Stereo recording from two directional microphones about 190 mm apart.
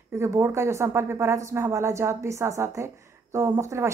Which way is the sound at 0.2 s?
15° right (ahead or behind).